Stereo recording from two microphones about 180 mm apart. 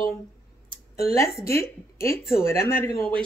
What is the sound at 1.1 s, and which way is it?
Speech, 15° left (ahead or behind).